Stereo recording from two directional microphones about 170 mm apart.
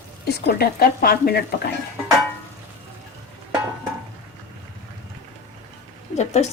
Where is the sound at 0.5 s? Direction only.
65° left (ahead or behind).